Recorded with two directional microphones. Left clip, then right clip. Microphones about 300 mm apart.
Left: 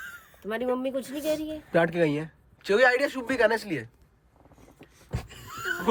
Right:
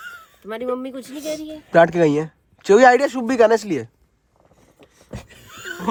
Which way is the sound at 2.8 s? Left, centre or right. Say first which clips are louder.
Right 6 dB; right.